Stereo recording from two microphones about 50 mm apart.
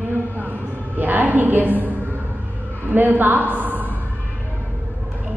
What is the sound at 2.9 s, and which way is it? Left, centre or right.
A woman's voice, right.